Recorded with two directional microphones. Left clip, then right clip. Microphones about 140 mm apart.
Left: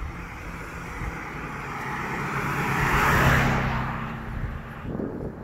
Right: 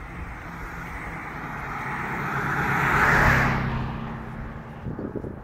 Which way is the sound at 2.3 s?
25° left (ahead or behind).